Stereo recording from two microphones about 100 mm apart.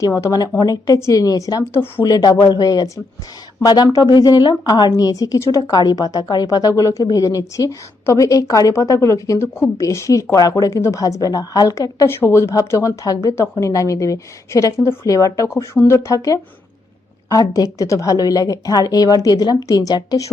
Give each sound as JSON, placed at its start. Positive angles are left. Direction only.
{"t": 0.3, "sound": "a woman's voice", "side_deg": 40}
{"t": 1.7, "sound": "speech", "side_deg": 20}
{"t": 2.0, "sound": "a woman's voice", "side_deg": 40}